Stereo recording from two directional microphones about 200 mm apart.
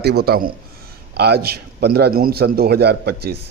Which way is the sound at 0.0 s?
50° right (ahead or behind).